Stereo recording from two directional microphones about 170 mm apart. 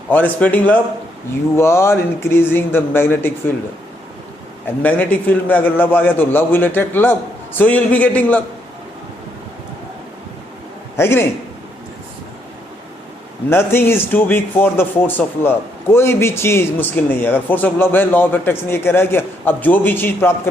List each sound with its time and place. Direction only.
0.1 s a man's voice: 10° left (ahead or behind)
4.8 s a man's voice: 10° left (ahead or behind)
10.9 s a man's voice: 15° left (ahead or behind)
13.5 s a man's voice: 15° left (ahead or behind)